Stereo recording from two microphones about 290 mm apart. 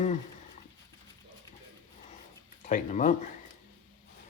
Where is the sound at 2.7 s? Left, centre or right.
Left.